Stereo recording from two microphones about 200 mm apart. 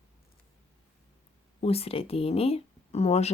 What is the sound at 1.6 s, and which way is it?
Speech, 30° left (ahead or behind).